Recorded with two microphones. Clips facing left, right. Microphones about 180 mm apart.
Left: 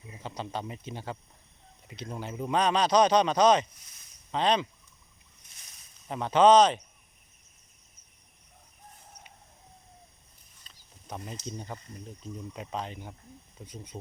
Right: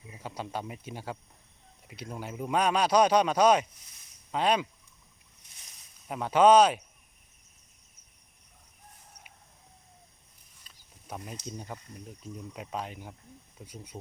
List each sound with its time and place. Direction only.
0.2 s speech: 5° right (ahead or behind)
6.1 s speech: 5° right (ahead or behind)
10.6 s speech: 5° right (ahead or behind)